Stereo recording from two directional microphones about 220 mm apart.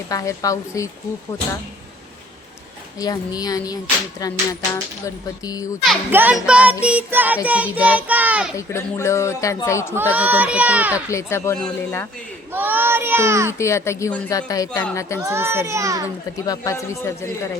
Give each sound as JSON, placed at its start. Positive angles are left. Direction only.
{"t": 0.1, "sound": "a woman's voice", "side_deg": 15}
{"t": 3.0, "sound": "a woman's voice", "side_deg": 15}
{"t": 5.8, "sound": "a child's voice", "side_deg": -5}
{"t": 8.5, "sound": "a woman's voice", "side_deg": 15}
{"t": 9.9, "sound": "speech", "side_deg": -10}
{"t": 11.1, "sound": "a woman's voice", "side_deg": 10}
{"t": 12.5, "sound": "child singing", "side_deg": -10}
{"t": 13.5, "sound": "a woman's voice", "side_deg": 10}
{"t": 15.2, "sound": "speech", "side_deg": -10}
{"t": 16.5, "sound": "a woman's voice", "side_deg": 15}